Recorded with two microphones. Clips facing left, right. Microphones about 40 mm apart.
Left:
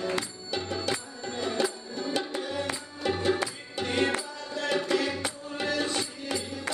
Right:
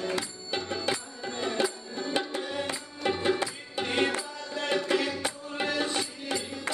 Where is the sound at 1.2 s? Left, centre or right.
Centre.